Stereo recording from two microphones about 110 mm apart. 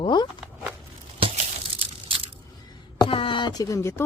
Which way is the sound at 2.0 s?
55° right (ahead or behind).